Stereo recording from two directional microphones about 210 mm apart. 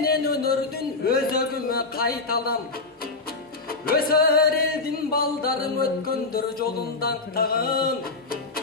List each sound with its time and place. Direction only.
0.0 s a sound: 45° left (ahead or behind)
1.0 s a man's voice: 45° left (ahead or behind)
3.8 s music: 45° left (ahead or behind)